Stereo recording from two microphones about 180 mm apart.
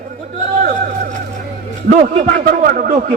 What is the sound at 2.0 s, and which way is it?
Speech, 50° right (ahead or behind).